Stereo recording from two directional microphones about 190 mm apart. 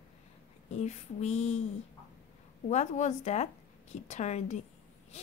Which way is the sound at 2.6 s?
40° left (ahead or behind).